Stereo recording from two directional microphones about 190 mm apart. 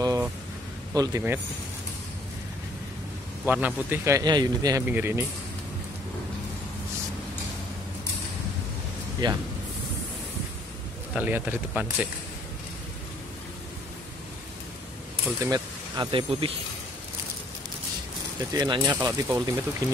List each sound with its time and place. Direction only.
0.0 s a sound: 20° right (ahead or behind)
0.9 s a man's voice: 15° right (ahead or behind)
3.4 s a man's voice: 10° right (ahead or behind)
9.2 s speech: 25° right (ahead or behind)
11.1 s a man's voice: 10° right (ahead or behind)
15.4 s speech: 20° right (ahead or behind)
18.5 s speech: 20° right (ahead or behind)